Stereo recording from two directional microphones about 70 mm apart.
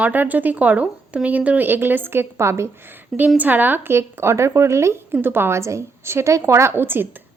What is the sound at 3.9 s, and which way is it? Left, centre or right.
A woman's voice, right.